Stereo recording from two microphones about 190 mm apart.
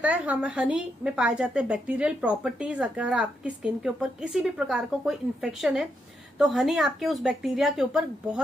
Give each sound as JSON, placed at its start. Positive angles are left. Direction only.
{"t": 0.0, "sound": "a woman's voice", "side_deg": -5}